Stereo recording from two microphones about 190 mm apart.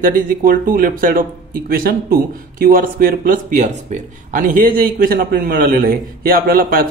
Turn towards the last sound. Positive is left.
turn(degrees=-50)  # may be behind; listen again after turning